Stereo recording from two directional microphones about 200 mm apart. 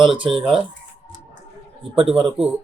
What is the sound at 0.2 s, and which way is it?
Speech, 25° right (ahead or behind).